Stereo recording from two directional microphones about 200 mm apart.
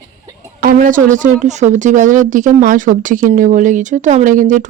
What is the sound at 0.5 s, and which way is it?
Speech, 45° right (ahead or behind).